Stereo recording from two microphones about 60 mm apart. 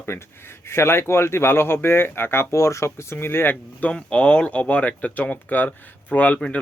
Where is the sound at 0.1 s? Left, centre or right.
Left.